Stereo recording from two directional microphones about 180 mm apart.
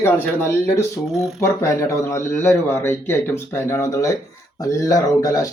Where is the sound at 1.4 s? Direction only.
15° left (ahead or behind).